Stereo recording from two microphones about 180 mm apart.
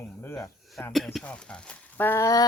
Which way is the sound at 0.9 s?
Centre (ahead or behind).